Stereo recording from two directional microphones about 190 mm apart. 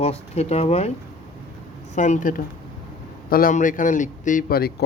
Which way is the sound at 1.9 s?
40° left (ahead or behind).